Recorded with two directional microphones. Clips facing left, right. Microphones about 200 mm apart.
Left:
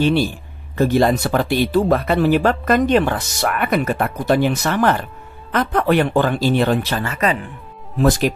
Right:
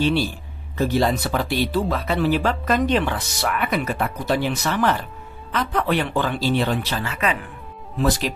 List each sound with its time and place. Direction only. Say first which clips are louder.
0.7 s speech: left 5 dB; 50° left (ahead or behind)